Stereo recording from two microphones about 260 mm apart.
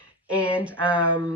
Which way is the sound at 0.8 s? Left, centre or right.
Centre.